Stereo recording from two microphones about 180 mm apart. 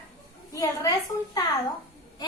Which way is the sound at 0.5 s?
20° left (ahead or behind).